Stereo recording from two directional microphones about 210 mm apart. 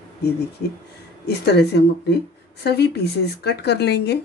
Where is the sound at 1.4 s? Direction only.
50° left (ahead or behind).